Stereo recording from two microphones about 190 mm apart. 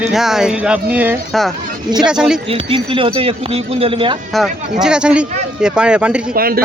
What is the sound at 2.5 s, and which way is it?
Speech, 30° right (ahead or behind).